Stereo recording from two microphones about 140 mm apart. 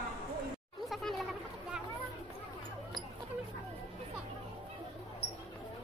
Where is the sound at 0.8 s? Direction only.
Centre (ahead or behind).